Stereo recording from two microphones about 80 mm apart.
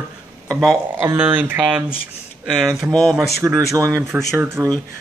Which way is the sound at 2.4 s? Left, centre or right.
Centre.